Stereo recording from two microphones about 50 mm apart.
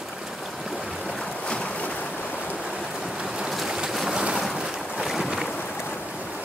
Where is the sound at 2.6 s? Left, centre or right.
Centre.